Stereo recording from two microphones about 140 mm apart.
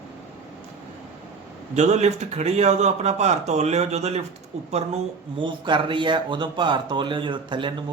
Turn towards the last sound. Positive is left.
turn(degrees=-35)  # may be behind; listen again after turning